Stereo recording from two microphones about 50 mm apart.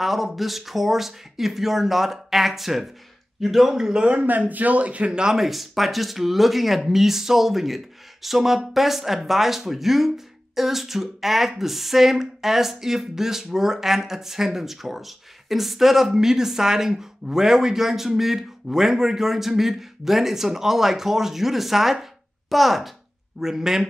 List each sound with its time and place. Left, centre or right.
0.0 s a man's voice: centre
4.3 s speech: right; by 5.4 s centre
5.4 s a man's voice: centre